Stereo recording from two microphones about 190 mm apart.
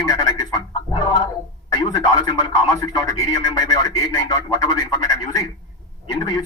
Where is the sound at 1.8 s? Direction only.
20° left (ahead or behind).